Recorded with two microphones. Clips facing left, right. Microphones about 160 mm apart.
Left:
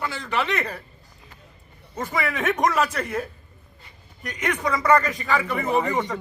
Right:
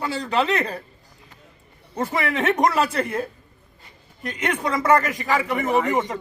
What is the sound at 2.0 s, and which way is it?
A man's voice, 30° right (ahead or behind).